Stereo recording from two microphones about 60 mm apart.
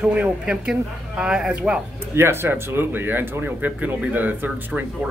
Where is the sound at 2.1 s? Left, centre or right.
Right.